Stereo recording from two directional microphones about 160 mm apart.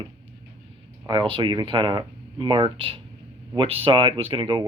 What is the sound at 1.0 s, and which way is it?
Speech, 30° right (ahead or behind).